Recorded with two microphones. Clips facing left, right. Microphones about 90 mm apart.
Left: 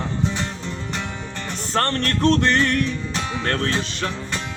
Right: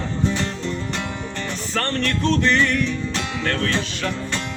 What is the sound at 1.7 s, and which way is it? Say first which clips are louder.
Music: left 2 dB; 45° left (ahead or behind).